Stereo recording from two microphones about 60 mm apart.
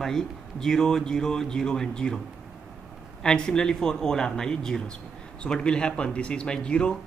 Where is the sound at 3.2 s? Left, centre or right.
Centre.